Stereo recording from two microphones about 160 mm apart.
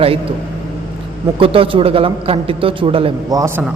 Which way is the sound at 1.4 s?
35° right (ahead or behind).